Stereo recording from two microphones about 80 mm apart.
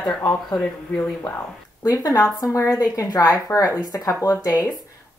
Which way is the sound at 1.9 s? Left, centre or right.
Left.